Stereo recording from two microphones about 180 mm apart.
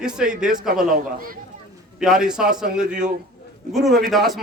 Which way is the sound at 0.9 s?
50° right (ahead or behind).